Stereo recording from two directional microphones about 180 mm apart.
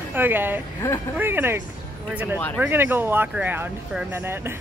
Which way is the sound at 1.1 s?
10° right (ahead or behind).